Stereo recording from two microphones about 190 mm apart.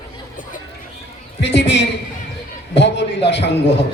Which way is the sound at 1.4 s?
65° left (ahead or behind).